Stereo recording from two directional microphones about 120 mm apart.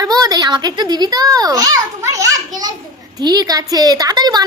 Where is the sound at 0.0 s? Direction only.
30° right (ahead or behind).